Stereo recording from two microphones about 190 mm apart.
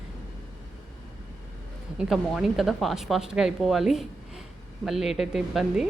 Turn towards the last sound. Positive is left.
turn(degrees=0)  # may be behind; listen again after turning